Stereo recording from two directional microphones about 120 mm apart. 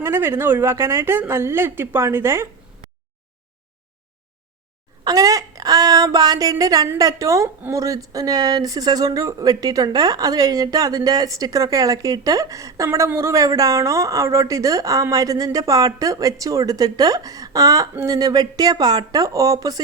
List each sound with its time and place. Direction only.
0.0 s speech: 20° right (ahead or behind)
5.0 s speech: 30° right (ahead or behind)